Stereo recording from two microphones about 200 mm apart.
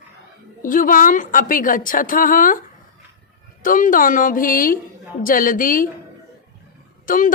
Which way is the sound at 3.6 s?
40° left (ahead or behind).